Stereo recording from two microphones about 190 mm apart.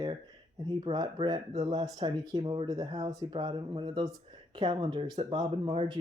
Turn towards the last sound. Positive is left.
turn(degrees=-30)  # may be behind; listen again after turning